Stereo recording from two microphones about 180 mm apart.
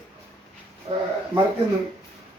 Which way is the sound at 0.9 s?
25° right (ahead or behind).